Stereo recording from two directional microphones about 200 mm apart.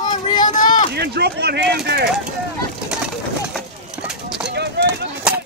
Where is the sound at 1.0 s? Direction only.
55° right (ahead or behind).